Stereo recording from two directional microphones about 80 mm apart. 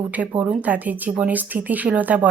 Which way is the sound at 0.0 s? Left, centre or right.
Centre.